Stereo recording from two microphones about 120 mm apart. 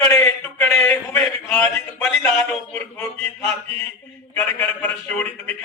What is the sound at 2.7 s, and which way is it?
A man's voice, 20° left (ahead or behind).